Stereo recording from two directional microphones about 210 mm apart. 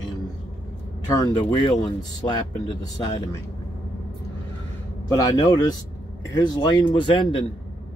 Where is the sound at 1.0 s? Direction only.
20° left (ahead or behind).